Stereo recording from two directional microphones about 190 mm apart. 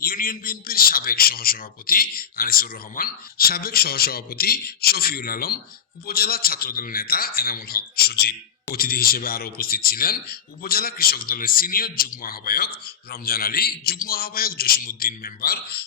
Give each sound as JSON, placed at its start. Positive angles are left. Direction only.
{"t": 0.0, "sound": "speech", "side_deg": 50}